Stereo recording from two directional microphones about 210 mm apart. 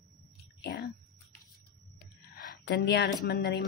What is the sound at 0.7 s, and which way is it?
Speech, 55° left (ahead or behind).